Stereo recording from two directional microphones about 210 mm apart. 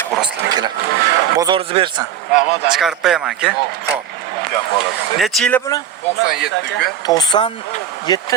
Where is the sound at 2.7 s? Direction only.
Centre (ahead or behind).